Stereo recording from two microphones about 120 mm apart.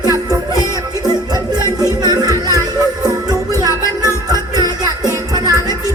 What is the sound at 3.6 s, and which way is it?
Music, 35° right (ahead or behind).